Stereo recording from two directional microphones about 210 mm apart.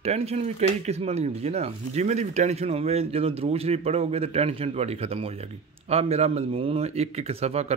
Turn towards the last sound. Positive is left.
turn(degrees=-30)  # may be behind; listen again after turning